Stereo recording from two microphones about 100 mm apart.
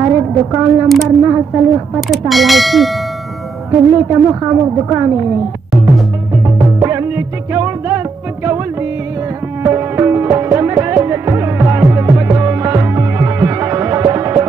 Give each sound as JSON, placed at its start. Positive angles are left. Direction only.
{"t": 0.0, "sound": "a sound", "side_deg": -25}
{"t": 1.0, "sound": "a woman's voice", "side_deg": -25}
{"t": 2.0, "sound": "speech", "side_deg": 0}
{"t": 3.9, "sound": "a woman's voice", "side_deg": -20}
{"t": 6.3, "sound": "music", "side_deg": -25}
{"t": 9.6, "sound": "music", "side_deg": -25}